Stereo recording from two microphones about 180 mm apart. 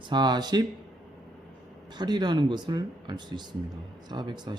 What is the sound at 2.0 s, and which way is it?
Speech, 25° right (ahead or behind).